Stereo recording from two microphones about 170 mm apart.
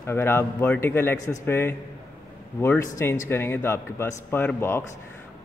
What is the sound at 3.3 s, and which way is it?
Speech, 15° left (ahead or behind).